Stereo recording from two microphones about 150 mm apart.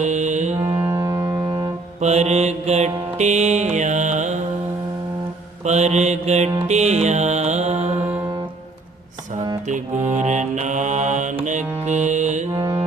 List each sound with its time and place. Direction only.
0.0 s music: 50° right (ahead or behind)
0.6 s music: 20° right (ahead or behind)
2.0 s mantra: 45° right (ahead or behind)
5.6 s mantra: 50° right (ahead or behind)
6.7 s music: 50° right (ahead or behind)
9.6 s mantra: 55° right (ahead or behind)
12.5 s music: 20° right (ahead or behind)